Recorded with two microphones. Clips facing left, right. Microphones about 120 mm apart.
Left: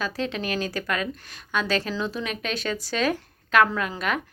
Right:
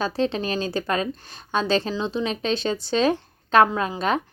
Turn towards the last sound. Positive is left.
turn(degrees=-30)  # may be behind; listen again after turning